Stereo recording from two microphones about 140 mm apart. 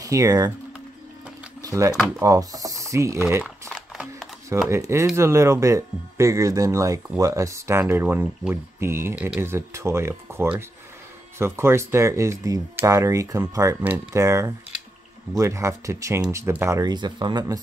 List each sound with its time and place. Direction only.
0.0 s speech: 25° right (ahead or behind)
1.6 s a sound: 25° right (ahead or behind)
2.1 s speech: 25° right (ahead or behind)
3.7 s a sound: centre (ahead or behind)
4.6 s speech: 20° right (ahead or behind)
16.9 s speech: 30° right (ahead or behind)